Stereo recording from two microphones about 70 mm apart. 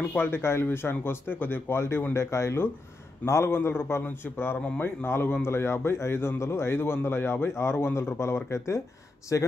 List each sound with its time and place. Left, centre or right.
0.2 s a man's voice: left